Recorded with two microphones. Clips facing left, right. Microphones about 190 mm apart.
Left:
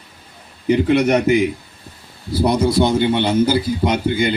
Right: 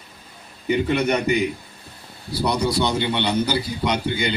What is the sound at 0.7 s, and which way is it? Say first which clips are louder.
Speech: left 6 dB; 90° left.